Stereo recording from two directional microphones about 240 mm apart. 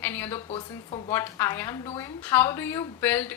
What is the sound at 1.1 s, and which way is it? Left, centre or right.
A woman's voice, centre.